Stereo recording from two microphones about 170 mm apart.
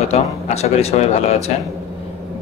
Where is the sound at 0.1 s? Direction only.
40° left (ahead or behind).